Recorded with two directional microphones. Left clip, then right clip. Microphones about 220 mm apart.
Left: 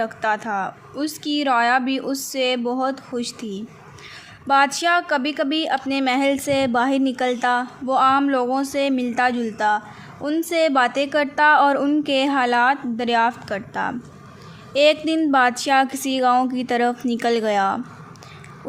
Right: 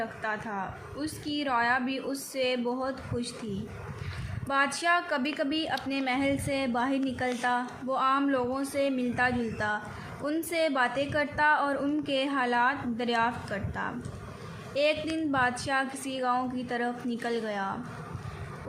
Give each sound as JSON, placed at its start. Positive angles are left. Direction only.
{"t": 0.0, "sound": "a woman's voice", "side_deg": 50}
{"t": 4.4, "sound": "a woman's voice", "side_deg": 45}